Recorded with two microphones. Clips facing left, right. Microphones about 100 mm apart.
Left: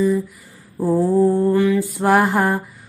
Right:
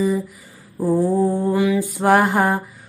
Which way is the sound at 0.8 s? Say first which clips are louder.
Left 2 dB; 5° left (ahead or behind).